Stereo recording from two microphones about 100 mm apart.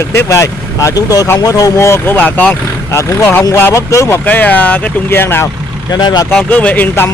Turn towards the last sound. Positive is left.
turn(degrees=20)  # may be behind; listen again after turning